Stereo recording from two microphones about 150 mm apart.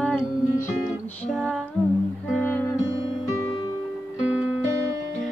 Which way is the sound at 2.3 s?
15° left (ahead or behind).